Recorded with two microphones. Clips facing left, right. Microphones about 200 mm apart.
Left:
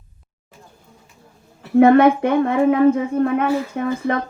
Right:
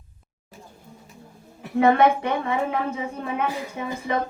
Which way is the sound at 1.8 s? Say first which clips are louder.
Left 6 dB; 55° left (ahead or behind).